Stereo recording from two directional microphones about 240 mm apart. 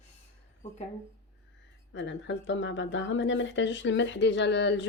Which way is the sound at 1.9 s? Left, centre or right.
Left.